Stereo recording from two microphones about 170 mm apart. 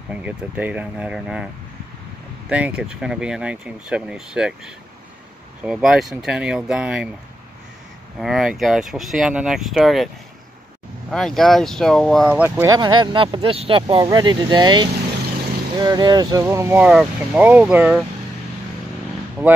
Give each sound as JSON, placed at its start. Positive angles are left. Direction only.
{"t": 0.1, "sound": "speech", "side_deg": -10}
{"t": 2.5, "sound": "speech", "side_deg": -5}
{"t": 8.2, "sound": "speech", "side_deg": -5}
{"t": 11.1, "sound": "speech", "side_deg": 0}